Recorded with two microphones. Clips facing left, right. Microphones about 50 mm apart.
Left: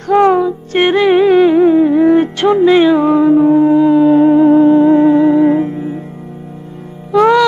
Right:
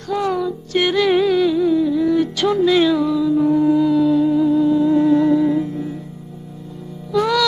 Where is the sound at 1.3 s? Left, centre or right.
Left.